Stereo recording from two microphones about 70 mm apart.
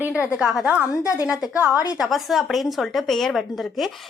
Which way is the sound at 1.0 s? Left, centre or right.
Left.